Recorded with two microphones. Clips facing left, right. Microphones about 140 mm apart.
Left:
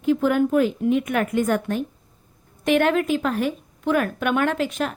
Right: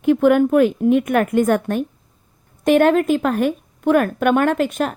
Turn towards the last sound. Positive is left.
turn(degrees=-50)  # may be behind; listen again after turning